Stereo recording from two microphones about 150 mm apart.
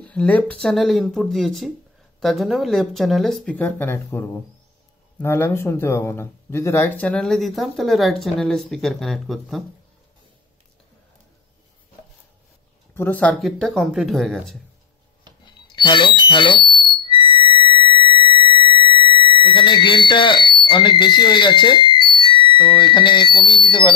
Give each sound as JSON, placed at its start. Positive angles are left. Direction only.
{"t": 0.0, "sound": "speech", "side_deg": 5}
{"t": 12.9, "sound": "speech", "side_deg": 10}
{"t": 15.4, "sound": "alarm", "side_deg": 30}
{"t": 17.0, "sound": "sine wave", "side_deg": 35}
{"t": 22.2, "sound": "speech", "side_deg": 35}